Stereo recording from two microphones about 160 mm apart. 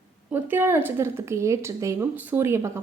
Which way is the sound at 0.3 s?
10° right (ahead or behind).